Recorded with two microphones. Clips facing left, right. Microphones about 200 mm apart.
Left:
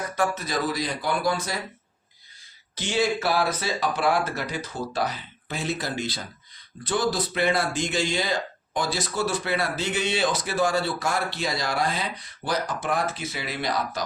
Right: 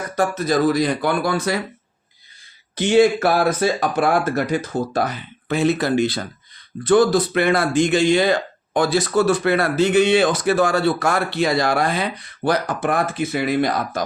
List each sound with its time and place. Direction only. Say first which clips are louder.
0.2 s speech: right 8 dB; 45° right (ahead or behind); by 1.6 s 65° right (ahead or behind)
2.7 s speech: right 10 dB; 55° right (ahead or behind)